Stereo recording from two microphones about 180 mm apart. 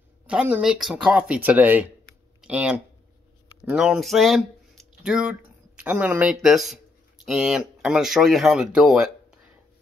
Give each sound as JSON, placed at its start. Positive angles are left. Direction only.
{"t": 0.3, "sound": "speech", "side_deg": -5}